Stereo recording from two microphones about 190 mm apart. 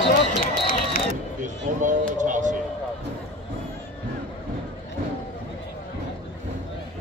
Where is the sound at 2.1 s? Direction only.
40° right (ahead or behind).